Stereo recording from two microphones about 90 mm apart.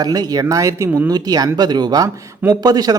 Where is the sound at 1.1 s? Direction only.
45° right (ahead or behind).